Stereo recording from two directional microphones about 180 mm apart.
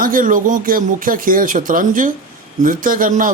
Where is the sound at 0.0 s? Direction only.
50° right (ahead or behind).